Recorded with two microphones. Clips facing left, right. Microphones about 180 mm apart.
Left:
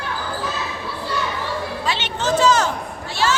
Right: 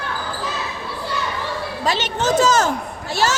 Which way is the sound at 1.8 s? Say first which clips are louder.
Right 5 dB; 40° right (ahead or behind).